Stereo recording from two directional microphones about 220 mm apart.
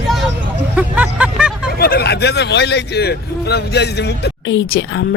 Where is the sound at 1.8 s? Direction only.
45° left (ahead or behind).